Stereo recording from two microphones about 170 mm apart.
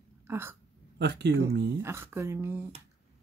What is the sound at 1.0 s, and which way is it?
Speech, 90° right.